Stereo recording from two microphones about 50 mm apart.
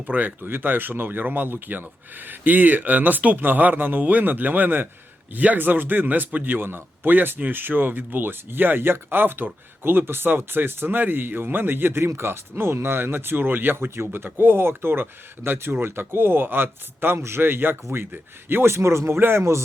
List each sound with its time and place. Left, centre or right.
0.0 s a man's voice: right
17.2 s speech: right
17.4 s a man's voice: right
18.7 s speech: right